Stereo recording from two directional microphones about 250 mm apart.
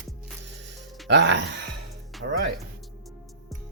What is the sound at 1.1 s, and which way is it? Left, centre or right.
Speech, right.